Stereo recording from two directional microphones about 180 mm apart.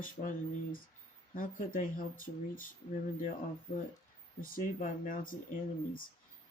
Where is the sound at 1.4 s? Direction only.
50° left (ahead or behind).